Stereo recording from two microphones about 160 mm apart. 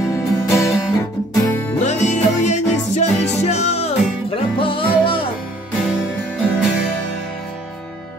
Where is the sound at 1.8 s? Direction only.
45° left (ahead or behind).